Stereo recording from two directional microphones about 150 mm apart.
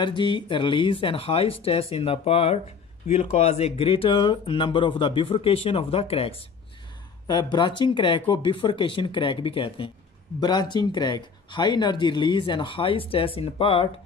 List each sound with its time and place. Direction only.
0.0 s speech: 30° left (ahead or behind)
7.2 s speech: 30° left (ahead or behind)